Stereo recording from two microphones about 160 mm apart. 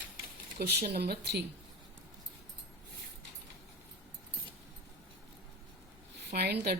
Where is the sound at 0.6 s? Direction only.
75° right (ahead or behind).